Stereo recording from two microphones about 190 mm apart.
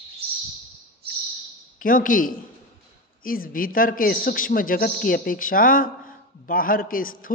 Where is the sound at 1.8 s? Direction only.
45° left (ahead or behind).